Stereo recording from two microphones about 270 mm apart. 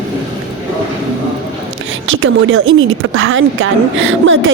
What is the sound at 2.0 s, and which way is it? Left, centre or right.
Speech, right.